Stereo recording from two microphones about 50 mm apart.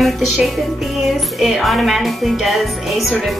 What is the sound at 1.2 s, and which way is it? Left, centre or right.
Speech, centre.